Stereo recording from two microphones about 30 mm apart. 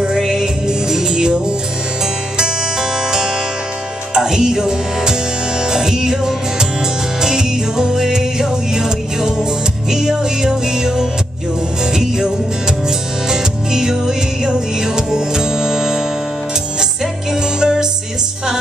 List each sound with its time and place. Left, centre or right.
0.2 s music: centre
7.9 s music: centre
17.4 s music: right